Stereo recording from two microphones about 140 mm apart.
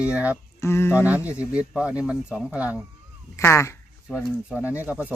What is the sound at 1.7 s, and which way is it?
Speech, 5° right (ahead or behind).